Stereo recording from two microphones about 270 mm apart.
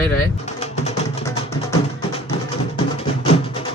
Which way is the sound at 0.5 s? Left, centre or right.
Left.